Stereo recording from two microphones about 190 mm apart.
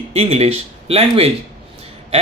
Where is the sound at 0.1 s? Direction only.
35° right (ahead or behind).